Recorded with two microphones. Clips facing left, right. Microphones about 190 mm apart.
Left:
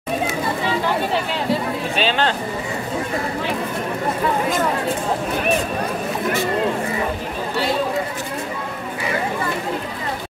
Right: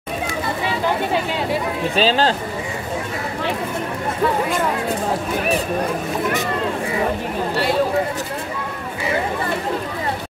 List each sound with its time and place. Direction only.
2.0 s speech: 35° right (ahead or behind)